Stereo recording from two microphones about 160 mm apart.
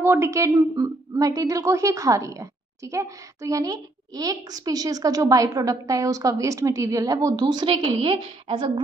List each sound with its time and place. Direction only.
0.0 s a woman's voice: 15° right (ahead or behind); by 8.7 s 35° right (ahead or behind)